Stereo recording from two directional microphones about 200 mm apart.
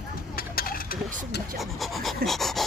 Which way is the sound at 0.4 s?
50° left (ahead or behind).